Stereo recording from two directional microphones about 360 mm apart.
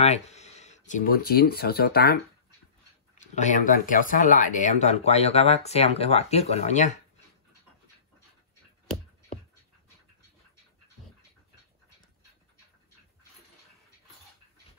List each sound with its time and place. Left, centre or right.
0.0 s speech: centre
3.3 s speech: centre